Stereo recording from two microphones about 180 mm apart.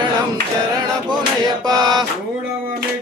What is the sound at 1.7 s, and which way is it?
Mantra, 25° right (ahead or behind).